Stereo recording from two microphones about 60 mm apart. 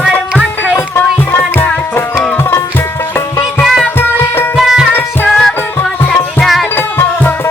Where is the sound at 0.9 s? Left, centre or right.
Left.